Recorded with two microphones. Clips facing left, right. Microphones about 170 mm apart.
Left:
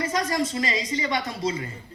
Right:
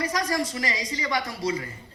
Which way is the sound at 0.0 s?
20° left (ahead or behind).